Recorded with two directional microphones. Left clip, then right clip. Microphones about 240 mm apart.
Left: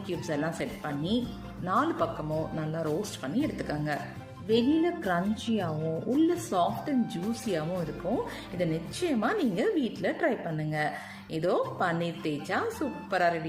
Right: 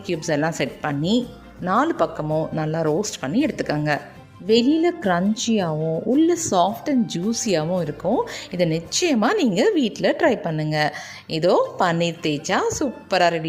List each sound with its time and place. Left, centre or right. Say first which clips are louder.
0.1 s a woman's voice: right 10 dB; right